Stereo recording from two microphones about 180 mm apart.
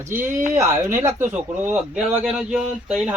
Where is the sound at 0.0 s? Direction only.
15° right (ahead or behind).